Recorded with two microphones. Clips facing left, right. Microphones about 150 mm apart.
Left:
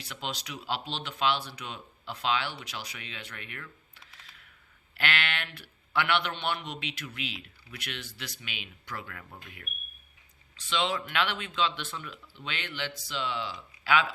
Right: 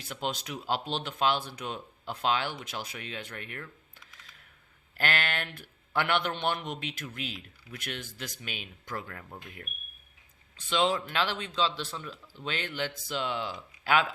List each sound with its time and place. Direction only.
0.0 s a man's voice: 45° right (ahead or behind)
4.0 s camera: 35° left (ahead or behind)
4.9 s a man's voice: 40° right (ahead or behind)